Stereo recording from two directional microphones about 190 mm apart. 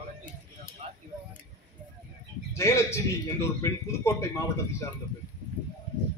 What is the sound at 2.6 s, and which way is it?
A man's voice, 15° left (ahead or behind).